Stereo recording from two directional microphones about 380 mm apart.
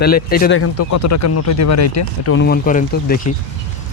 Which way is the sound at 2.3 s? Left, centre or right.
Left.